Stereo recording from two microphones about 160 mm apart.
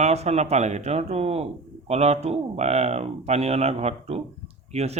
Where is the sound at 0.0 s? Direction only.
40° right (ahead or behind).